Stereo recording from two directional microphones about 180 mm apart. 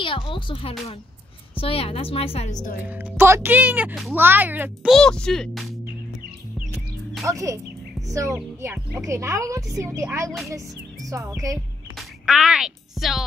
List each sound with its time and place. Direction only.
0.0 s a woman's voice: 25° left (ahead or behind)
2.8 s a woman's voice: 10° right (ahead or behind)
4.9 s speech: 5° left (ahead or behind)
7.2 s a woman's voice: 15° right (ahead or behind)
12.0 s music: 5° right (ahead or behind)